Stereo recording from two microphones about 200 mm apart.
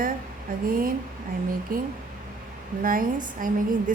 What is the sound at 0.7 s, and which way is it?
A woman's voice, 45° right (ahead or behind).